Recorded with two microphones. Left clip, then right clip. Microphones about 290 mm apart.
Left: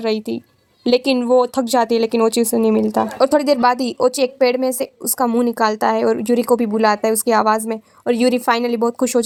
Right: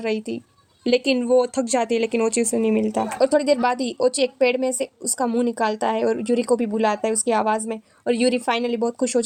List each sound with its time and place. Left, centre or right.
0.0 s speech: centre